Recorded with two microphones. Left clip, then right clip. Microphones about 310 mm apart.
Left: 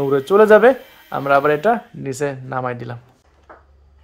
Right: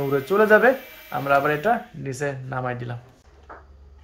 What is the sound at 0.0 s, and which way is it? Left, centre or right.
Speech, left.